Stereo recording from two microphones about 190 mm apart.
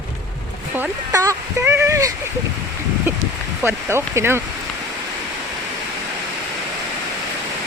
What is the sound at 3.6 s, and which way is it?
Speech, 10° right (ahead or behind).